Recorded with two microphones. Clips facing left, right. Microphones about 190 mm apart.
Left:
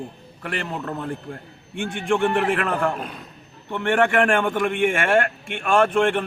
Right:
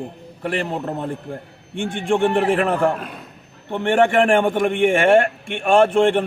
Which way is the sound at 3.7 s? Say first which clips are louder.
Right 3 dB; 30° right (ahead or behind).